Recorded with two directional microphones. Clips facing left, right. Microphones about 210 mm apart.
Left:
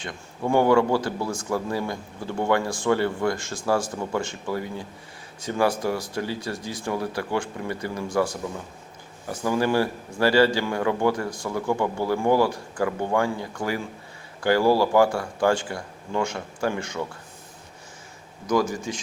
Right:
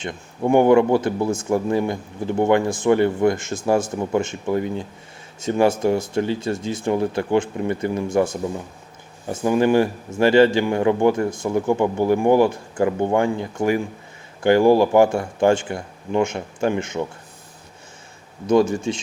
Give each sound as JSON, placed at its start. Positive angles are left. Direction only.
{"t": 0.0, "sound": "speech", "side_deg": -20}
{"t": 18.4, "sound": "speech", "side_deg": -25}